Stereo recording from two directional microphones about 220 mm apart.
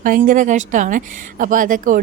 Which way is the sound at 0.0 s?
40° right (ahead or behind).